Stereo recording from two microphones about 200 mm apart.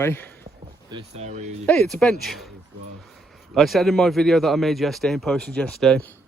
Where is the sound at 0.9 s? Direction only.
30° right (ahead or behind).